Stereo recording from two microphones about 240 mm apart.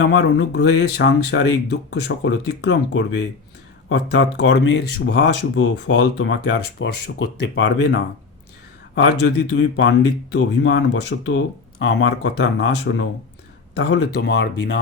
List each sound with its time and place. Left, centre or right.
0.0 s speech: left
9.2 s speech: left